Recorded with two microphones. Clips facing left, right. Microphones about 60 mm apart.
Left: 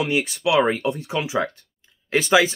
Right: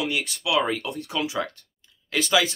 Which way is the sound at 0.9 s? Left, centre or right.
Centre.